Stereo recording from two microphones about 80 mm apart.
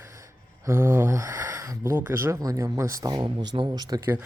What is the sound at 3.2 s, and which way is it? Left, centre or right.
Speech, right.